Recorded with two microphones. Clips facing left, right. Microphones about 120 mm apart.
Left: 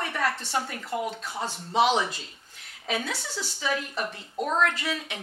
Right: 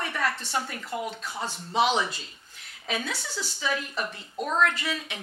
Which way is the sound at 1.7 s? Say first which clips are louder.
Left 1 dB; 50° left (ahead or behind).